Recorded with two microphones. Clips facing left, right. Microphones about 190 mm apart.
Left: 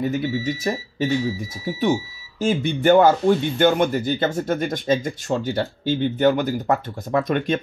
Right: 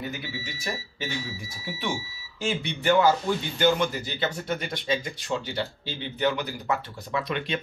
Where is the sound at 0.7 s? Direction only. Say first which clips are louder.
Left 9 dB; 35° left (ahead or behind).